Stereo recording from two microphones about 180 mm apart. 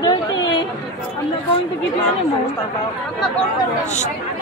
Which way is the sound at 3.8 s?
40° left (ahead or behind).